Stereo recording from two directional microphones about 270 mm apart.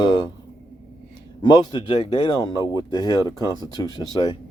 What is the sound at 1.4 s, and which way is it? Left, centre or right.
Speech, centre.